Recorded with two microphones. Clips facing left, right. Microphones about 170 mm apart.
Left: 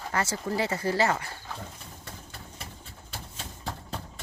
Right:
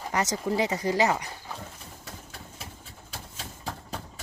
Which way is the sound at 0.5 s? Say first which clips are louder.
Right 1 dB; 15° right (ahead or behind).